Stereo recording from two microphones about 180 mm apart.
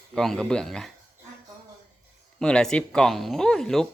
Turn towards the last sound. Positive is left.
turn(degrees=5)  # may be behind; listen again after turning